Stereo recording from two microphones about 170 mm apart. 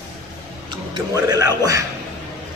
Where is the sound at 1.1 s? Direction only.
20° right (ahead or behind).